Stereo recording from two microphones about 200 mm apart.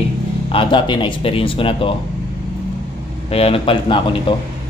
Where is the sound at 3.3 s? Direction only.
30° left (ahead or behind).